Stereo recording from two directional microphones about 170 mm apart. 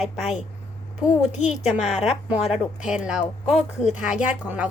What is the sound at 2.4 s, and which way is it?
Speech, 35° left (ahead or behind).